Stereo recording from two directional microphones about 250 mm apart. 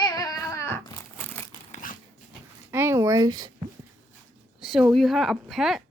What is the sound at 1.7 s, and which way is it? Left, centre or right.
Biting, left.